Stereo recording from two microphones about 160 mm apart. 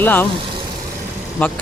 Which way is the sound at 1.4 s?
10° left (ahead or behind).